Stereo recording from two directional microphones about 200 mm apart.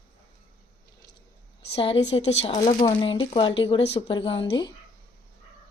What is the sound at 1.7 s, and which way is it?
Speech, 25° left (ahead or behind).